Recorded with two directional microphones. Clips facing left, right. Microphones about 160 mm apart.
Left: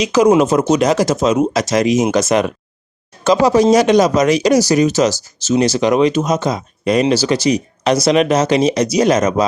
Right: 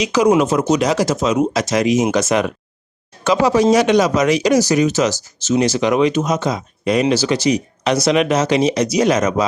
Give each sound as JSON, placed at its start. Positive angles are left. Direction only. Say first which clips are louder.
{"t": 0.0, "sound": "speech", "louder": "left 3 dB", "side_deg": 45}